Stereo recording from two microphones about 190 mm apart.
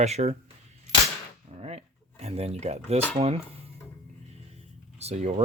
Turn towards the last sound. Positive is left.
turn(degrees=-35)  # may be behind; listen again after turning